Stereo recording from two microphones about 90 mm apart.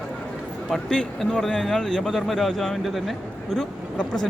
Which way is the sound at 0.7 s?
5° left (ahead or behind).